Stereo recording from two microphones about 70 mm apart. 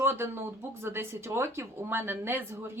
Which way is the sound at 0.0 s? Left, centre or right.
Right.